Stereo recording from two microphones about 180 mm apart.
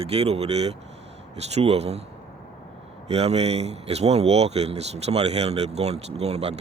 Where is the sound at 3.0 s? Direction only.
35° right (ahead or behind).